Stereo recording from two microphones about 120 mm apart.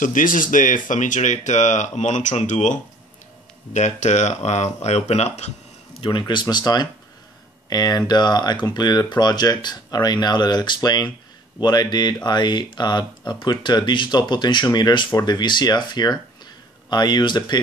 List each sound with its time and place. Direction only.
0.0 s speech: 90° left
3.7 s speech: 75° left (ahead or behind)
5.9 s speech: 40° left (ahead or behind)